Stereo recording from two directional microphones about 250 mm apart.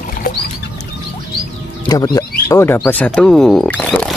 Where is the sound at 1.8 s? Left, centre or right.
Centre.